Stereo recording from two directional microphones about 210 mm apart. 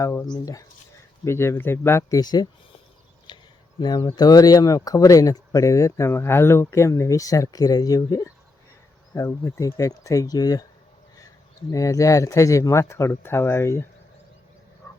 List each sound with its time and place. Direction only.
0.0 s speech: 15° left (ahead or behind)
3.3 s a sound: 20° left (ahead or behind)
3.8 s speech: 20° left (ahead or behind)
11.7 s speech: 15° left (ahead or behind)